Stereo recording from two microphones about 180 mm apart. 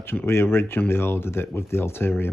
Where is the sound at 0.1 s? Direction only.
10° left (ahead or behind).